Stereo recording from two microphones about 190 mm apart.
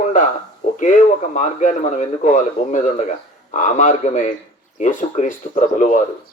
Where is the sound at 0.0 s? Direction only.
40° left (ahead or behind).